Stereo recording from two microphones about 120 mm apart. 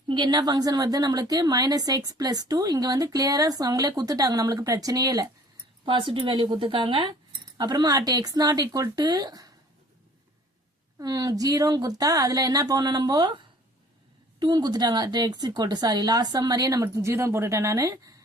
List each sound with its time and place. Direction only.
0.1 s a woman's voice: 40° right (ahead or behind)
5.8 s a woman's voice: 45° right (ahead or behind)
11.0 s a woman's voice: 30° right (ahead or behind)